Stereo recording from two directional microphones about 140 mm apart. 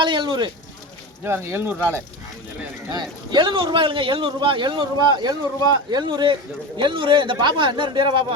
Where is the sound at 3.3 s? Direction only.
35° right (ahead or behind).